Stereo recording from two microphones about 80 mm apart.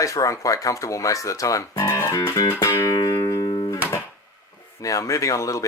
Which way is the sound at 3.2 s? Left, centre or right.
Left.